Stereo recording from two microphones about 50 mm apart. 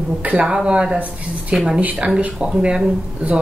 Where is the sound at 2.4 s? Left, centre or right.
Centre.